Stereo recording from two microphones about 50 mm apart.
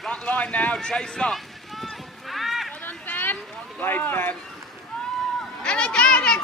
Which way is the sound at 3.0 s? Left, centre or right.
Left.